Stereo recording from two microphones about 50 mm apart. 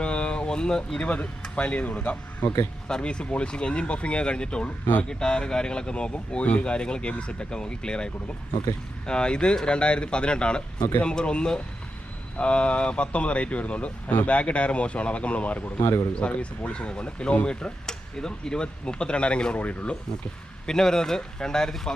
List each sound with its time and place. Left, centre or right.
0.0 s a sound: left
0.9 s speech: left
2.8 s speech: centre; by 15.9 s left
16.1 s speech: left
20.7 s speech: centre